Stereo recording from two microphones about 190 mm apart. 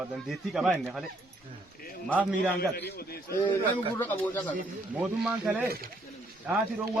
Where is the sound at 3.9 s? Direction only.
10° left (ahead or behind).